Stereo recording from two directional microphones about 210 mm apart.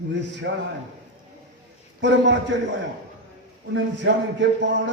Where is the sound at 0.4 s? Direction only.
55° right (ahead or behind).